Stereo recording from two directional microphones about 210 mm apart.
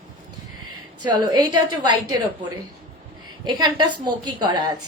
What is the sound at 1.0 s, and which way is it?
A woman's voice, 20° right (ahead or behind).